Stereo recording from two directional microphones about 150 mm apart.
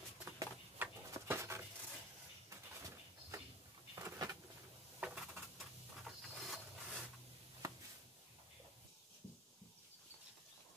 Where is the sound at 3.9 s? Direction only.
25° right (ahead or behind).